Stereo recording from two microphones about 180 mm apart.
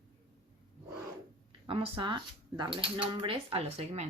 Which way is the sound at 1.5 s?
30° right (ahead or behind).